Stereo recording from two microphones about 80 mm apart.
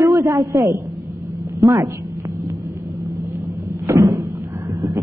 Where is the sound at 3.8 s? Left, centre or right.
Right.